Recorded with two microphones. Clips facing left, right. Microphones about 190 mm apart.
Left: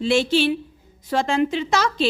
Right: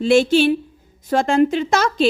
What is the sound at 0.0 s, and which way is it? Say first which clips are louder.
A woman's voice: right 5 dB; 50° right (ahead or behind).